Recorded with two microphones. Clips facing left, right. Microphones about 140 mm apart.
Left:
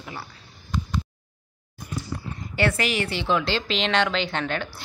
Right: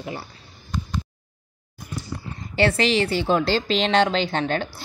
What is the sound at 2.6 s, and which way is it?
Speech, 25° right (ahead or behind).